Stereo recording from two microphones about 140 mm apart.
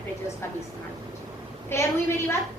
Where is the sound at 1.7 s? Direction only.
15° left (ahead or behind).